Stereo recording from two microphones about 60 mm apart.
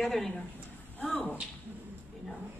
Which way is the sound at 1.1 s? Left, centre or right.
Left.